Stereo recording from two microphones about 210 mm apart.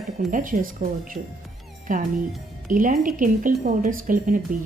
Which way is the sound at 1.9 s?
40° right (ahead or behind).